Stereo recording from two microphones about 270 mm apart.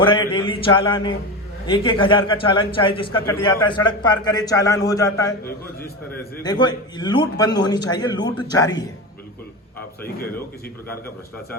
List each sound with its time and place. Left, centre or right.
0.0 s a sound: centre
0.4 s a man's voice: centre
6.4 s a man's voice: centre